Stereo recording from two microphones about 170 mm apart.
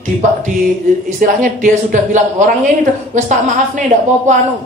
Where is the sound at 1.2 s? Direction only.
50° right (ahead or behind).